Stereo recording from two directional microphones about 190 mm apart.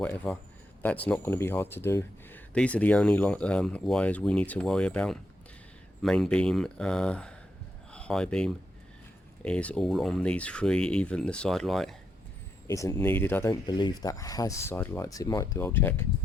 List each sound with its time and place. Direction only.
0.0 s speech: 10° left (ahead or behind)
12.6 s speech: 15° left (ahead or behind)
13.5 s speech: 25° left (ahead or behind)